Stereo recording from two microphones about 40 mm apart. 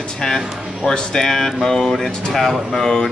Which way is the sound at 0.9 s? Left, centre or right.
Centre.